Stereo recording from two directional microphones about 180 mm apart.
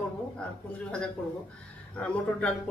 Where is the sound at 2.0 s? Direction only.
5° left (ahead or behind).